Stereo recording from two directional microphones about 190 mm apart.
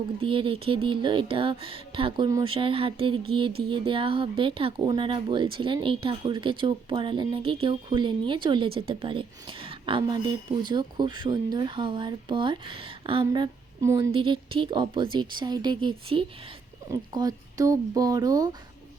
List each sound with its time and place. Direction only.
0.2 s speech: 25° right (ahead or behind)